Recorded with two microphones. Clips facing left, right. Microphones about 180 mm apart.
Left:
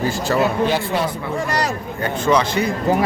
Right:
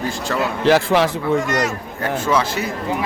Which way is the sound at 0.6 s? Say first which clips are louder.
Right 4 dB; 90° right.